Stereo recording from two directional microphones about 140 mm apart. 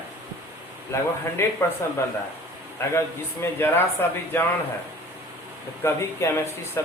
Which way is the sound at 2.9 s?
15° left (ahead or behind).